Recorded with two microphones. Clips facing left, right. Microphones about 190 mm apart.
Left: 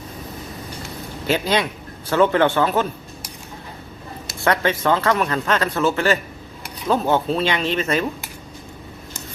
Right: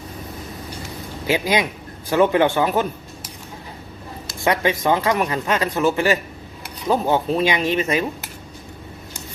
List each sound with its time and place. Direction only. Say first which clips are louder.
1.3 s speech: even; 10° right (ahead or behind)
4.4 s speech: even; 15° right (ahead or behind)